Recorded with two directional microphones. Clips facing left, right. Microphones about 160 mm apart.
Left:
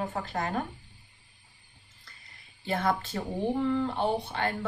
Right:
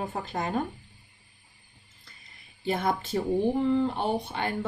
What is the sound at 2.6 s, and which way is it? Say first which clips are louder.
Speech: right 1 dB; 15° right (ahead or behind).